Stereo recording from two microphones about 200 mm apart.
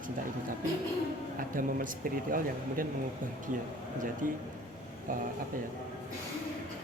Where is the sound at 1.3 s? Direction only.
45° right (ahead or behind).